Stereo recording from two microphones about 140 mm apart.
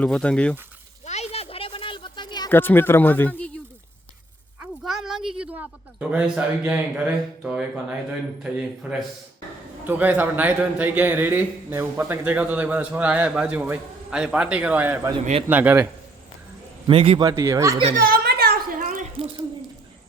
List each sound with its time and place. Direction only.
0.0 s speech: 5° left (ahead or behind)
1.0 s a sound: 50° left (ahead or behind); by 2.5 s 30° left (ahead or behind)
2.5 s speech: 15° left (ahead or behind)
4.6 s a woman's voice: 5° right (ahead or behind)
16.8 s a man's voice: 40° right (ahead or behind)
17.2 s speech: 25° right (ahead or behind)
17.9 s a sound: 90° right; by 19.0 s 60° right (ahead or behind)